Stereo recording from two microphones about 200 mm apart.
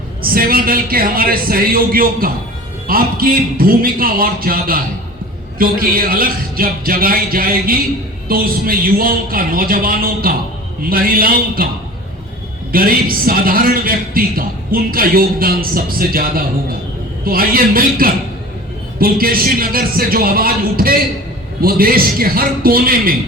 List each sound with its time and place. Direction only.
0.3 s a man's voice: 45° right (ahead or behind)
12.7 s a man's voice: 45° right (ahead or behind)